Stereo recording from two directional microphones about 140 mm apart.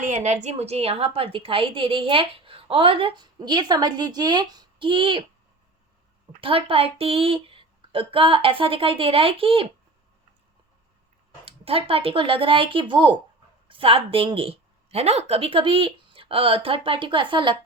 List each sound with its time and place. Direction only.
0.0 s a woman's voice: 55° right (ahead or behind); by 5.2 s 35° right (ahead or behind)
6.4 s a woman's voice: 40° right (ahead or behind)
11.4 s a woman's voice: 40° right (ahead or behind)